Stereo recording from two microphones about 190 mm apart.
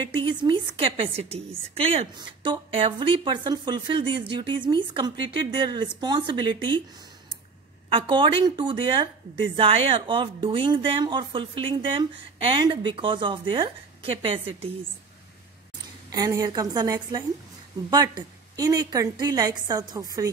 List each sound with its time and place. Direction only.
0.0 s speech: 25° right (ahead or behind)
16.1 s speech: 20° right (ahead or behind)